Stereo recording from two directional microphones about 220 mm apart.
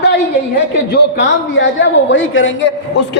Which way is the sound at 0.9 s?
50° left (ahead or behind).